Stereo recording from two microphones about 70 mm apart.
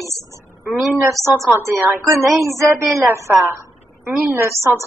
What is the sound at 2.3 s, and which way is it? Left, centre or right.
Speech, right.